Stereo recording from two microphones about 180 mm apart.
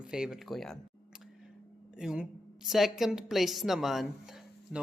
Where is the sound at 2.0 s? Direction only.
5° right (ahead or behind).